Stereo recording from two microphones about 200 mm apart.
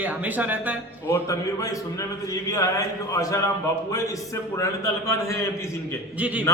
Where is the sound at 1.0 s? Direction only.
15° left (ahead or behind).